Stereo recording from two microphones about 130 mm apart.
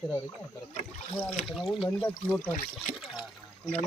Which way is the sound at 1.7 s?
40° left (ahead or behind).